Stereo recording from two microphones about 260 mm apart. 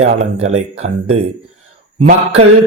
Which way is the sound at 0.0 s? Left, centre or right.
Right.